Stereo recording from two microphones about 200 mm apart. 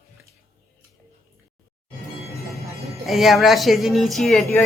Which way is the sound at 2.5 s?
Centre (ahead or behind).